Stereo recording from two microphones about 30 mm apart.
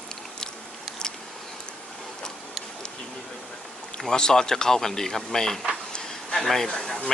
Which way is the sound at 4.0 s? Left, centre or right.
Centre.